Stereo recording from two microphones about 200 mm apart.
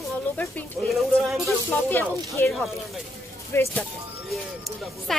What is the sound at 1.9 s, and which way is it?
Speech, 10° left (ahead or behind).